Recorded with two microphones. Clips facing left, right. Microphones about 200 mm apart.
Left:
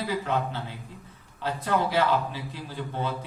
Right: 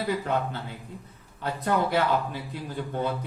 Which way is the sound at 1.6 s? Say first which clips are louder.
Even; 50° right (ahead or behind).